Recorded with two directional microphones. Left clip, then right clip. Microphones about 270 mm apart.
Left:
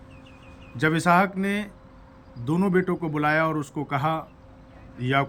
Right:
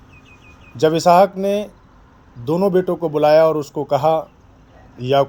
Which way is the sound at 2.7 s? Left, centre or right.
Left.